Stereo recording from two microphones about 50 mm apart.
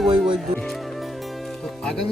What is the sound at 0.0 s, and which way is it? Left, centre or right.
Music, centre.